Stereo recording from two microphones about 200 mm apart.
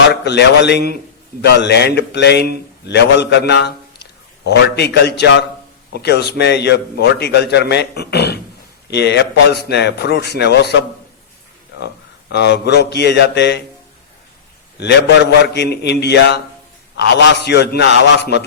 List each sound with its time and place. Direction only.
0.1 s a man's voice: 60° left (ahead or behind)
12.3 s a man's voice: 55° left (ahead or behind)
14.8 s a man's voice: 60° left (ahead or behind)